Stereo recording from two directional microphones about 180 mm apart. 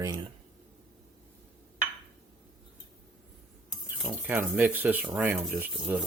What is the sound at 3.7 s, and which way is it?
Speech, centre (ahead or behind).